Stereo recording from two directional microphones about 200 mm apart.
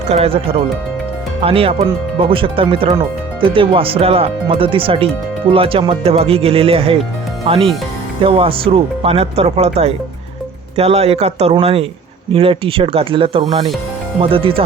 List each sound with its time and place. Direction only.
0.1 s speech: 30° right (ahead or behind)